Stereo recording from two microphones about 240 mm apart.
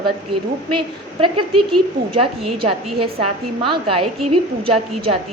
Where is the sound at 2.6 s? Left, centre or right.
Right.